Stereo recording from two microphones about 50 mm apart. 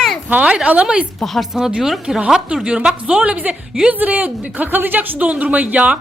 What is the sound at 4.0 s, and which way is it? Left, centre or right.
Speech, right.